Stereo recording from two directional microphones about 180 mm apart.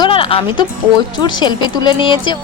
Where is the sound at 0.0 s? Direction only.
30° left (ahead or behind).